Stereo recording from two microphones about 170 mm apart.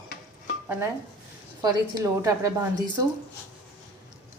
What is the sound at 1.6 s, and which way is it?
Speech, 20° right (ahead or behind).